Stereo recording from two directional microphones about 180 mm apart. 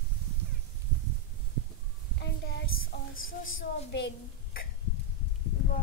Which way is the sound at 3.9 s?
75° left (ahead or behind).